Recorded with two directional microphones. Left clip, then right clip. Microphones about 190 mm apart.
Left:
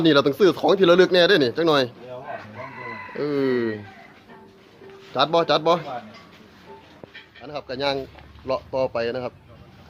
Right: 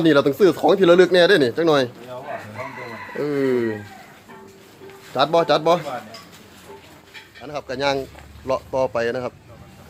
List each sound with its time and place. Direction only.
0.0 s speech: 5° left (ahead or behind)
3.2 s speech: 5° left (ahead or behind)
5.1 s speech: centre (ahead or behind)
7.4 s speech: 10° right (ahead or behind)